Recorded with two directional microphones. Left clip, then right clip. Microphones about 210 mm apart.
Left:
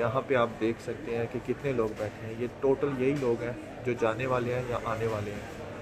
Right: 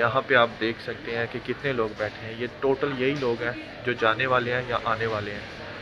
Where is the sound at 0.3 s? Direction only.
5° left (ahead or behind).